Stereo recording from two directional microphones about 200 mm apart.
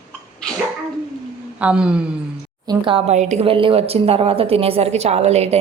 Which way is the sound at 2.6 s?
20° right (ahead or behind).